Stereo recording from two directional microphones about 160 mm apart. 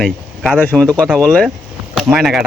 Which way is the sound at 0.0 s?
5° left (ahead or behind).